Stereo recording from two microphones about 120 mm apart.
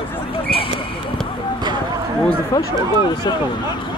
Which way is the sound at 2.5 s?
30° left (ahead or behind).